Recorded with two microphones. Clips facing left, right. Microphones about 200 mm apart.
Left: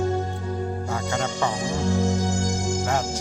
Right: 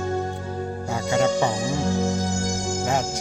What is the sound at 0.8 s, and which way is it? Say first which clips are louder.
Music: right 10 dB; 15° right (ahead or behind).